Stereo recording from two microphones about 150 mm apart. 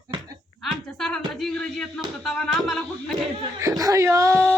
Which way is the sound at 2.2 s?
5° left (ahead or behind).